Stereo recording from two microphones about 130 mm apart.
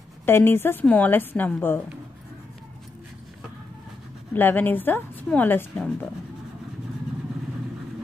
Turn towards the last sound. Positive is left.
turn(degrees=10)  # may be behind; listen again after turning